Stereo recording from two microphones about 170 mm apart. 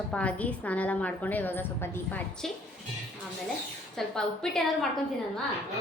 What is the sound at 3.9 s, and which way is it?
Speech, 5° left (ahead or behind).